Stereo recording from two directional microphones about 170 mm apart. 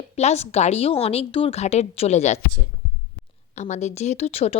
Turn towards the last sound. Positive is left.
turn(degrees=40)  # may be behind; listen again after turning